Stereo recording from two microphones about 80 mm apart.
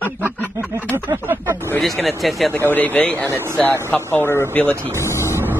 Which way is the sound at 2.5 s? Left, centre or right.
Left.